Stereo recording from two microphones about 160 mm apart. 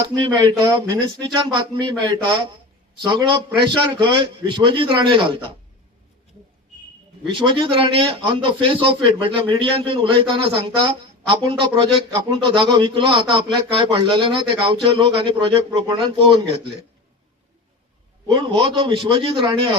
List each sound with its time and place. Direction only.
0.0 s a man's voice: 30° right (ahead or behind)
7.3 s a man's voice: 30° right (ahead or behind)
18.3 s a man's voice: 30° right (ahead or behind)